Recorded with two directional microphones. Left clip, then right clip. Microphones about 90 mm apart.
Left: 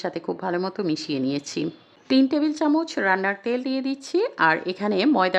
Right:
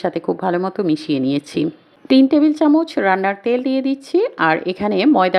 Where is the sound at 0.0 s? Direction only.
20° right (ahead or behind).